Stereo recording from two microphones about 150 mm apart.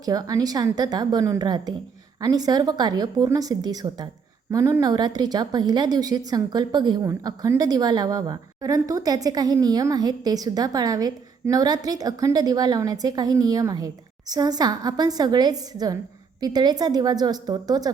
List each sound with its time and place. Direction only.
0.0 s a woman's voice: 25° right (ahead or behind)